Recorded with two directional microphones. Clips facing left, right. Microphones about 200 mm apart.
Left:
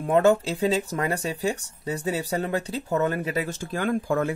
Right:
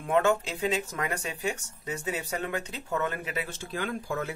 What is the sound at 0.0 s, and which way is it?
Speech, 35° left (ahead or behind).